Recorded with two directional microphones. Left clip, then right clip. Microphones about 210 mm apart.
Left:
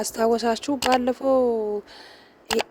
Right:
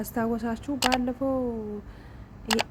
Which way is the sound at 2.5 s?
Centre (ahead or behind).